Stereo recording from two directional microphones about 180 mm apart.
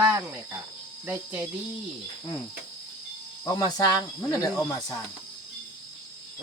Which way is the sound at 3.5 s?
20° left (ahead or behind).